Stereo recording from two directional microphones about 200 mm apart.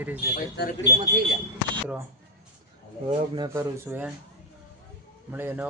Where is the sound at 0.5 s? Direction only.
55° left (ahead or behind).